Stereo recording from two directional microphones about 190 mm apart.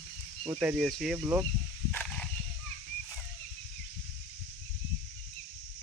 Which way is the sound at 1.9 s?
5° left (ahead or behind).